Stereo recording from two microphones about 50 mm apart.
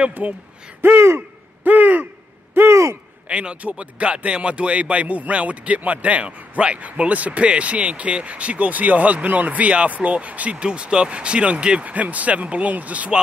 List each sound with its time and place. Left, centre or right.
0.2 s speech: right
0.8 s speech: right
1.6 s a sound: right
2.5 s speech: right
3.3 s speech: right